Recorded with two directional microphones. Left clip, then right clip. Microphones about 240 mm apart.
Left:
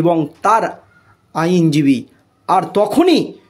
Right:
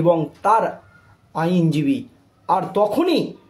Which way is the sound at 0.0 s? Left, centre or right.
Left.